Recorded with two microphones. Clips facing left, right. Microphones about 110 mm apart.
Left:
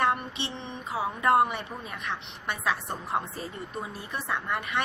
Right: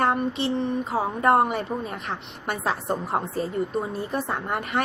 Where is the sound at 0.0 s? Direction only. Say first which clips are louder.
Right 5 dB; 40° right (ahead or behind).